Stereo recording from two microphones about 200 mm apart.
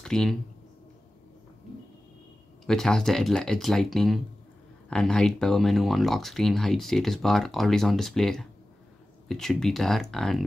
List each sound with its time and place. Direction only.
0.0 s speech: 5° left (ahead or behind)
2.6 s speech: centre (ahead or behind)